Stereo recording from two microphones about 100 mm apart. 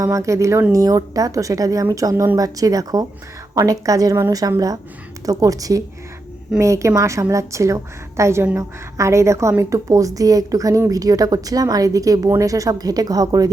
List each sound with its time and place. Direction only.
0.0 s a woman's voice: 30° right (ahead or behind)